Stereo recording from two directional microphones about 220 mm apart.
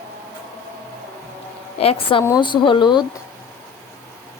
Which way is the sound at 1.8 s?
25° left (ahead or behind).